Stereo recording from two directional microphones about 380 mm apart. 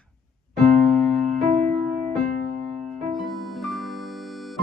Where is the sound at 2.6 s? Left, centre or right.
Centre.